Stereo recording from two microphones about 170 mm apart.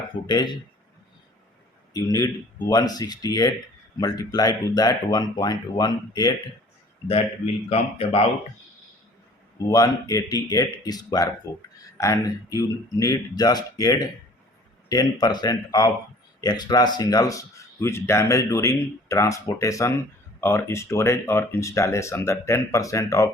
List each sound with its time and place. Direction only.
0.3 s speech: 25° left (ahead or behind)
1.9 s speech: 20° left (ahead or behind)
7.1 s a man's voice: 35° left (ahead or behind)
9.6 s speech: 20° left (ahead or behind)